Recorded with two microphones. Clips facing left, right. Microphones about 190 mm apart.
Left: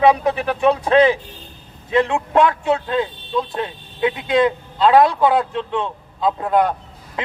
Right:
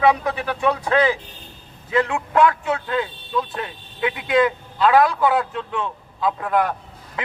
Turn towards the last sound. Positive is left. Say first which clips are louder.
# left 3 dB
turn(degrees=25)  # may be behind; listen again after turning